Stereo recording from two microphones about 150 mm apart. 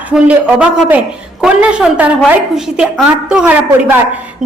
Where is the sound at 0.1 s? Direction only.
10° right (ahead or behind).